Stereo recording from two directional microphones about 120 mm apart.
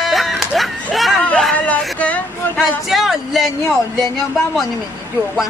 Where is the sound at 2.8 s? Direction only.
Centre (ahead or behind).